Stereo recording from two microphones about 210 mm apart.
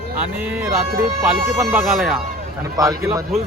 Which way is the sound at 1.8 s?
Centre (ahead or behind).